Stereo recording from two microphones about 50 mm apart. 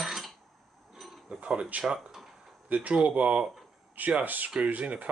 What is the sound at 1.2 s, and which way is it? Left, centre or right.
Speech, right.